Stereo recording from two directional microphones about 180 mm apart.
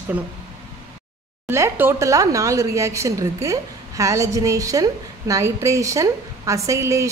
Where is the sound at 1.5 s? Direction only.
15° right (ahead or behind).